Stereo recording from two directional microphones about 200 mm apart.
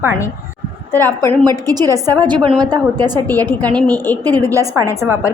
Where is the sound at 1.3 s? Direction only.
20° right (ahead or behind).